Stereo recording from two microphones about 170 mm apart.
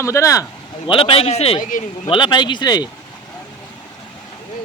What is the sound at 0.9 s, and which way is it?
A man's voice, 30° left (ahead or behind).